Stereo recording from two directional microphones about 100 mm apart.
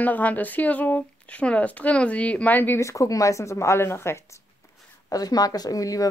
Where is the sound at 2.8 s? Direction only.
30° left (ahead or behind).